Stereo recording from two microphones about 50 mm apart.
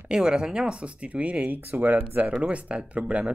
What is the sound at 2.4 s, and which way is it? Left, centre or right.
Speech, right.